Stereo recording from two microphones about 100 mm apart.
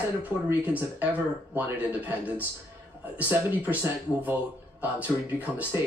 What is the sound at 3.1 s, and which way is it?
Speech, 15° right (ahead or behind).